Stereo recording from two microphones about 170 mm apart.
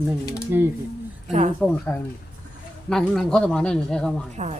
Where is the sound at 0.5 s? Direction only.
15° right (ahead or behind).